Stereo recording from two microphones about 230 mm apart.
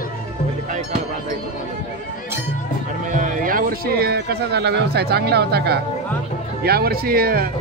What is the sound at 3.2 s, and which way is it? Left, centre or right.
Speech, right.